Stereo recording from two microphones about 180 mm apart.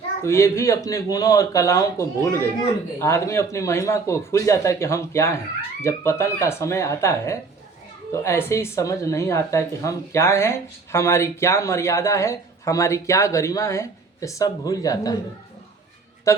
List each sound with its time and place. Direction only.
0.2 s speech: 15° left (ahead or behind)
16.3 s speech: 15° left (ahead or behind)